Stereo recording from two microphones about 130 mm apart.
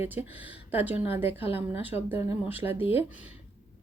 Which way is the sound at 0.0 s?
15° right (ahead or behind).